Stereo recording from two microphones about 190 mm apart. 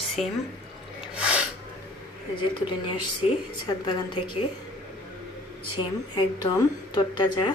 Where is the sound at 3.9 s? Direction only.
25° left (ahead or behind).